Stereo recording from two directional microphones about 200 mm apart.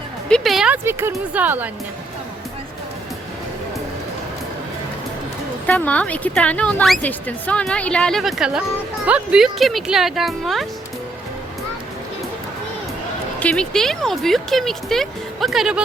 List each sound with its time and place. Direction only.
0.3 s speech: centre (ahead or behind)
5.6 s speech: 5° left (ahead or behind)
13.4 s speech: 5° left (ahead or behind)